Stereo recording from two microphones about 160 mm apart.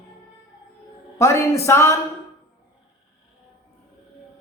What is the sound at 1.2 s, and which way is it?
Speech, 15° left (ahead or behind).